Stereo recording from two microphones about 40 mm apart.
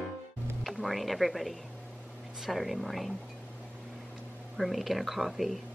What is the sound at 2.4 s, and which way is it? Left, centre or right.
Speech, centre.